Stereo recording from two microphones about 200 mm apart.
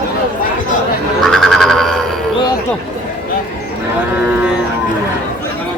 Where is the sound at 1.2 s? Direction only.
Centre (ahead or behind).